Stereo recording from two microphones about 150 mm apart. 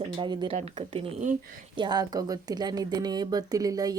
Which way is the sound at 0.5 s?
45° right (ahead or behind).